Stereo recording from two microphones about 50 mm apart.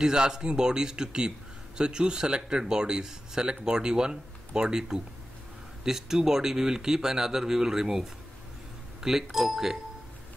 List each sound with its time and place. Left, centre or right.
0.0 s speech: centre